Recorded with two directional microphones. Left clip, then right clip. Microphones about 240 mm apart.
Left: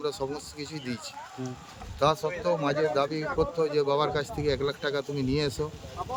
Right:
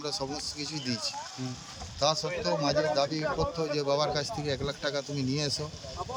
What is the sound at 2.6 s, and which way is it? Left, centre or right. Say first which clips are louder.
Speech: right 1 dB; centre.